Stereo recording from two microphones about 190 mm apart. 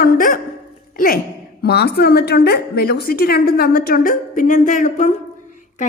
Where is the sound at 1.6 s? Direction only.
55° left (ahead or behind).